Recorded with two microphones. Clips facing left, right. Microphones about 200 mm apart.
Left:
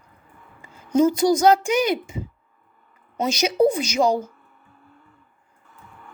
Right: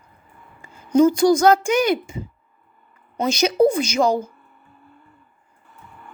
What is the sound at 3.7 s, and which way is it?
Speech, 15° left (ahead or behind).